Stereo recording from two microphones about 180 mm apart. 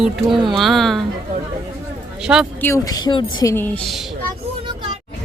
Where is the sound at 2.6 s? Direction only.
20° left (ahead or behind).